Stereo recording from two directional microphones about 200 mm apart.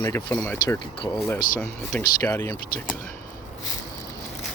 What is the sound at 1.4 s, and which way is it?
Speech, 45° left (ahead or behind).